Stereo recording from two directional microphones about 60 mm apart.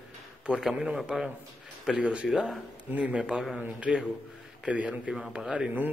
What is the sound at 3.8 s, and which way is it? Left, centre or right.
A man's voice, centre.